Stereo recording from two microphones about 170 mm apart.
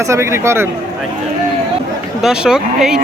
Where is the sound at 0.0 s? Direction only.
15° right (ahead or behind).